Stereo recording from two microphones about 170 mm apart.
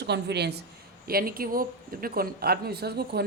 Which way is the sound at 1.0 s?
60° right (ahead or behind).